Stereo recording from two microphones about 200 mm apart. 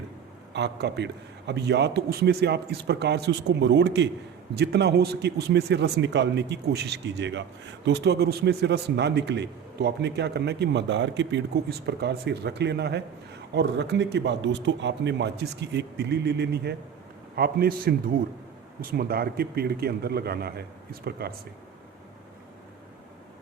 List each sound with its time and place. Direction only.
0.5 s a man's voice: 55° right (ahead or behind)